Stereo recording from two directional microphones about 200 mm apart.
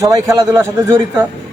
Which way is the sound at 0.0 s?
15° right (ahead or behind).